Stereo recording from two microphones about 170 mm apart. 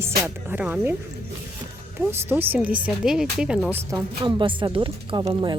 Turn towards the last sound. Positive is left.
turn(degrees=-25)  # may be behind; listen again after turning